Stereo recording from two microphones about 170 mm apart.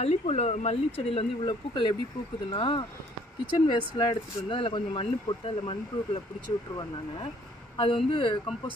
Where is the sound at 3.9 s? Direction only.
30° left (ahead or behind).